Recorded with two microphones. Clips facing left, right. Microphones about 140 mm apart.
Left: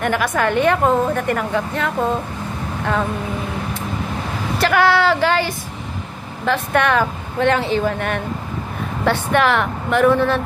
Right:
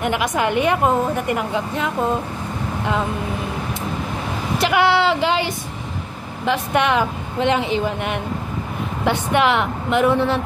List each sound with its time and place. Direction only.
0.0 s a woman's voice: 15° right (ahead or behind)
4.6 s a woman's voice: 20° right (ahead or behind)